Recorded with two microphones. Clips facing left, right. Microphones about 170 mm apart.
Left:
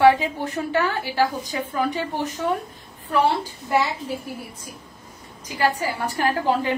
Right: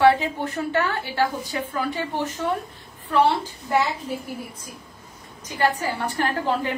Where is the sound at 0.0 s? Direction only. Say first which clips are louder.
Left 1 dB; 15° left (ahead or behind).